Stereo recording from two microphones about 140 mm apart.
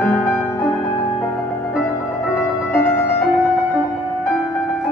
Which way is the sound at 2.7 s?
15° left (ahead or behind).